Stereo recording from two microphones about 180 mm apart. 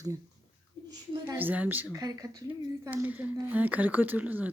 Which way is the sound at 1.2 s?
10° right (ahead or behind).